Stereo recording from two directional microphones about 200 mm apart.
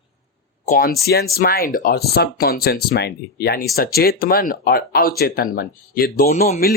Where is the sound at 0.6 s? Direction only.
45° left (ahead or behind).